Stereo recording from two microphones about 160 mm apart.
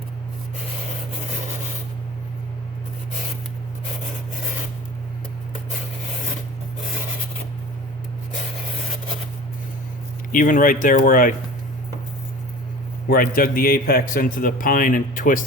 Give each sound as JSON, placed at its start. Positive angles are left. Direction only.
{"t": 10.3, "sound": "a man's voice", "side_deg": 55}
{"t": 13.1, "sound": "a man's voice", "side_deg": 65}